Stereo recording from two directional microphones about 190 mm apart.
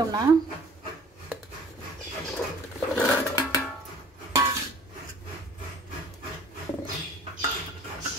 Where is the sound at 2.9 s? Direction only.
15° left (ahead or behind).